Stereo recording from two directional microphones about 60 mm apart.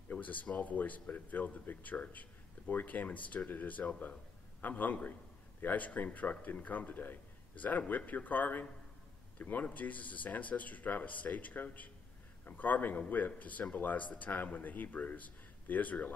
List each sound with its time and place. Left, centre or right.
0.1 s speech: left